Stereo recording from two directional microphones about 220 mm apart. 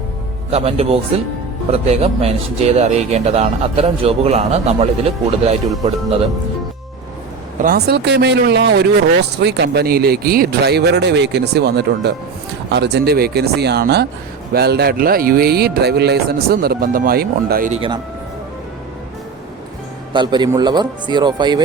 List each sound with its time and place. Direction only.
0.5 s speech: 25° right (ahead or behind)
7.6 s speech: 45° right (ahead or behind)
17.7 s speech: 25° right (ahead or behind)
20.1 s speech: 20° right (ahead or behind)